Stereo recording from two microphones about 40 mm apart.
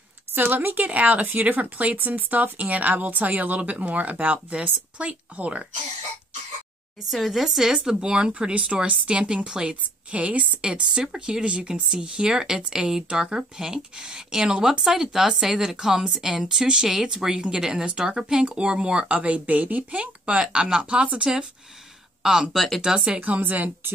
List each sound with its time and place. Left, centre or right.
0.3 s speech: right
7.1 s speech: centre
10.1 s speech: right
10.6 s speech: right
20.2 s speech: right
22.2 s speech: centre
22.9 s speech: right
23.2 s speech: right